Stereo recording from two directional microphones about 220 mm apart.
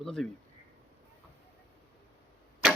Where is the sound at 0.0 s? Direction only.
Centre (ahead or behind).